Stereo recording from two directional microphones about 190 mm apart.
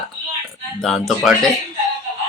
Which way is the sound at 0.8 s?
Centre (ahead or behind).